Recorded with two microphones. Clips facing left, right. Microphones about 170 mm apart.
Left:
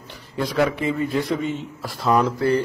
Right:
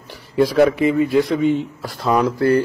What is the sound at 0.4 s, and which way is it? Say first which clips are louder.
A man's voice: right 7 dB; 5° right (ahead or behind).